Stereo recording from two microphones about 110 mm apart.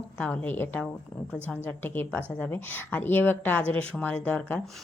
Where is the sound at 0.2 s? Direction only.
15° left (ahead or behind).